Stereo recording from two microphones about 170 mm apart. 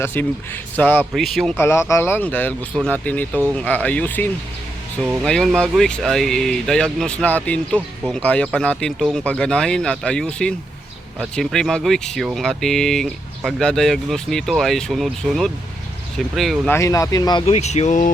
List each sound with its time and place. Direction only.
0.0 s speech: 10° left (ahead or behind)
1.5 s speech: 15° left (ahead or behind); by 16.6 s centre (ahead or behind)
16.6 s speech: 15° left (ahead or behind)
17.4 s speech: 40° left (ahead or behind)